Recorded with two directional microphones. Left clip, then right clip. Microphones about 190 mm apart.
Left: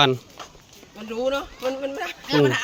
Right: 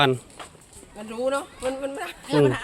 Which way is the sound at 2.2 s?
20° left (ahead or behind).